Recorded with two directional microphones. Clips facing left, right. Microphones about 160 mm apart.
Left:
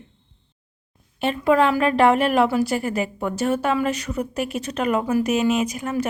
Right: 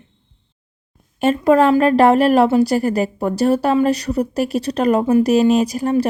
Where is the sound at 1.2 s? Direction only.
45° right (ahead or behind).